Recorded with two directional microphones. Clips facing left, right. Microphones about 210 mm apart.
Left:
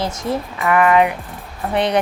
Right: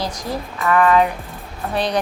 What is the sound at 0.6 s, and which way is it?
Speech, 10° left (ahead or behind).